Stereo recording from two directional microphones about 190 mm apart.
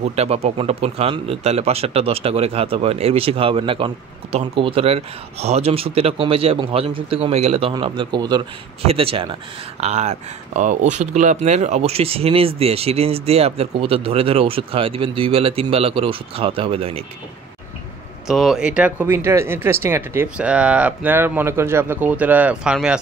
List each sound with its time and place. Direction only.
0.1 s a man's voice: 35° right (ahead or behind)
18.2 s speech: centre (ahead or behind)